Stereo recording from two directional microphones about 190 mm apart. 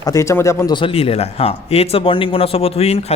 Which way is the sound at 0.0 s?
15° left (ahead or behind).